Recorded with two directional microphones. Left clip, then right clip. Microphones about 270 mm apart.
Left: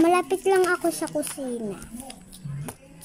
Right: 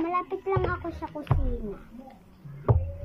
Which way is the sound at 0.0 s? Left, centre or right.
Left.